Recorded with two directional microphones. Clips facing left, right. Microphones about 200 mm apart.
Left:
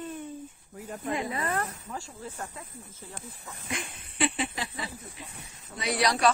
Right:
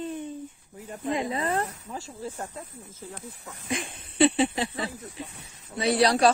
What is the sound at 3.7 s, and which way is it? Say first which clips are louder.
Speech: right 5 dB; 30° right (ahead or behind).